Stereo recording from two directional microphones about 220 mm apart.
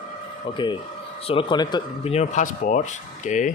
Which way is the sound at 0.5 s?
20° left (ahead or behind).